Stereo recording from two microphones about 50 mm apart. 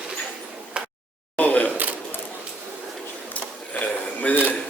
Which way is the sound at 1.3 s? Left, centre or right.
Left.